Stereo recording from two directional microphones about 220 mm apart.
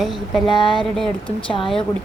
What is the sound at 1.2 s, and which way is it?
Speech, 25° left (ahead or behind).